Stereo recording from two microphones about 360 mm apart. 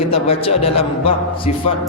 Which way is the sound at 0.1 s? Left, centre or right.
Centre.